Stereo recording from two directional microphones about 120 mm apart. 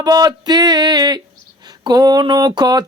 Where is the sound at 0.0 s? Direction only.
35° right (ahead or behind).